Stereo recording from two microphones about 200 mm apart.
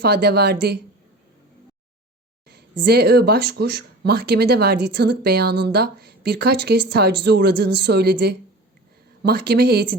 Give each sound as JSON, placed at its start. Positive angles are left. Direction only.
{"t": 0.0, "sound": "speech", "side_deg": -55}
{"t": 2.5, "sound": "speech", "side_deg": -55}